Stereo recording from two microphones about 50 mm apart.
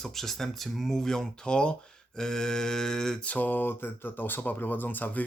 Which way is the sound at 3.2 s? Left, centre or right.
Left.